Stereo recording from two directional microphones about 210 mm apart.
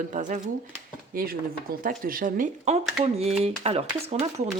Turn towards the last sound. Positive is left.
turn(degrees=-30)  # may be behind; listen again after turning